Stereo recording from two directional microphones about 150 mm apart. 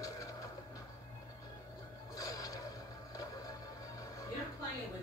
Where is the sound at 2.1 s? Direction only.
25° left (ahead or behind).